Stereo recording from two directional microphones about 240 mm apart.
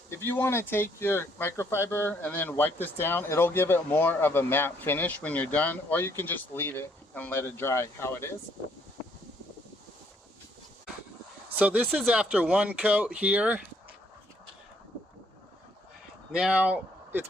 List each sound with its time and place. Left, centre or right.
0.3 s speech: centre
11.5 s speech: centre
16.3 s speech: centre